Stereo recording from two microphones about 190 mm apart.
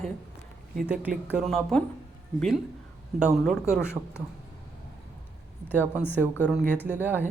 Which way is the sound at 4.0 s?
25° right (ahead or behind).